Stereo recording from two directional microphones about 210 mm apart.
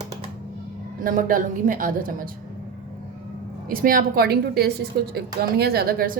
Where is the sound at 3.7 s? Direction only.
45° right (ahead or behind).